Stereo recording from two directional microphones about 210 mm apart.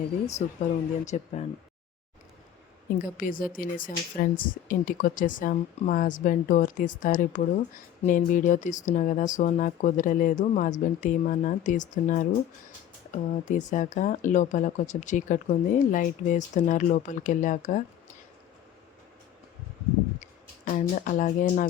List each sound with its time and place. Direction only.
0.3 s speech: 35° left (ahead or behind)
3.2 s speech: 40° left (ahead or behind)
20.7 s speech: 40° left (ahead or behind)